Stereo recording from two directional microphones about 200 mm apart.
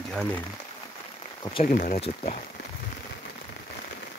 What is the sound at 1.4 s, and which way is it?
Speech, 25° left (ahead or behind).